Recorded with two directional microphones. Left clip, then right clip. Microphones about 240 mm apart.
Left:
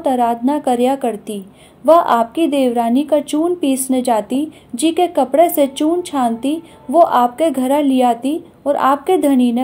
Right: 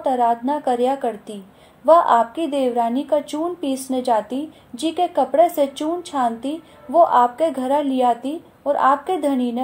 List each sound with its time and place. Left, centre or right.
0.0 s a woman's voice: left